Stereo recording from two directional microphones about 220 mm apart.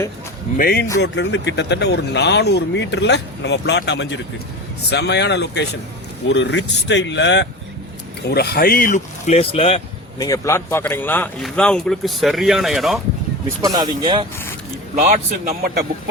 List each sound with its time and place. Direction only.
0.5 s speech: 45° left (ahead or behind); by 10.2 s 25° left (ahead or behind)
10.2 s speech: 15° left (ahead or behind)
13.6 s speech: 15° right (ahead or behind)
14.9 s a man's voice: 35° right (ahead or behind)